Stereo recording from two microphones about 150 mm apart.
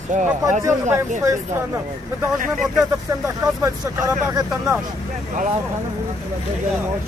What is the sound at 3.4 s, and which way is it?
Speech, 20° right (ahead or behind).